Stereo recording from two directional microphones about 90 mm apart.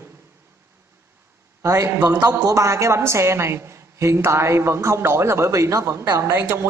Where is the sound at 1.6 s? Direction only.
35° right (ahead or behind).